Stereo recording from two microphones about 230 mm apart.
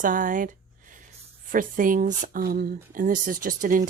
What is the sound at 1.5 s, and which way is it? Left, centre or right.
Speech, right.